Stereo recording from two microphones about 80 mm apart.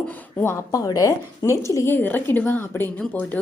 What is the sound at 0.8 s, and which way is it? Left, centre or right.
A woman's voice, left.